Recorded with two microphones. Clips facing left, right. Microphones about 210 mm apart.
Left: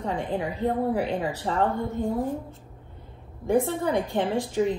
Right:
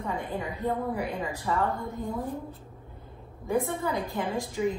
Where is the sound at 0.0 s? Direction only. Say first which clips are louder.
Left 4 dB; 90° left.